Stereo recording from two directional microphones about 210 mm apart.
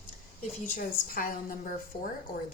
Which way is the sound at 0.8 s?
40° left (ahead or behind).